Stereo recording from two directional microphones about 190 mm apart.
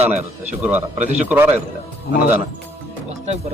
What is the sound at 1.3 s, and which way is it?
Speech, 10° right (ahead or behind).